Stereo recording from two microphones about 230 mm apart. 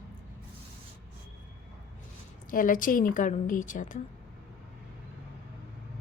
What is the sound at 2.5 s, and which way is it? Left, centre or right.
A woman's voice, left.